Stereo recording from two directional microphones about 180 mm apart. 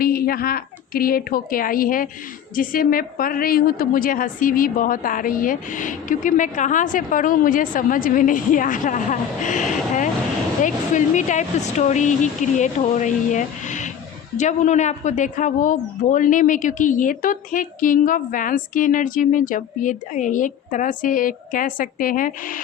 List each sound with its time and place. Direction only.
0.0 s a woman's voice: 55° left (ahead or behind)